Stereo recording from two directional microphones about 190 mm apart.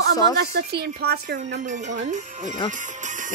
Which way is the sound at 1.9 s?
40° right (ahead or behind).